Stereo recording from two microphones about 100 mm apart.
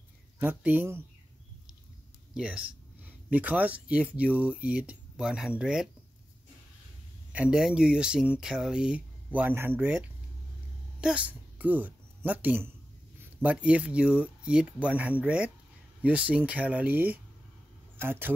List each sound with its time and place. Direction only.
0.4 s speech: 15° right (ahead or behind)
2.3 s speech: 10° right (ahead or behind)
7.3 s a woman's voice: 10° right (ahead or behind)